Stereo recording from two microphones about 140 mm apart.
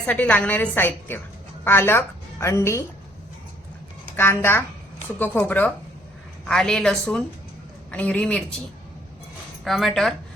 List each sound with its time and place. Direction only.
0.0 s a woman's voice: 10° left (ahead or behind)
4.2 s a woman's voice: 15° left (ahead or behind)
9.6 s a woman's voice: centre (ahead or behind)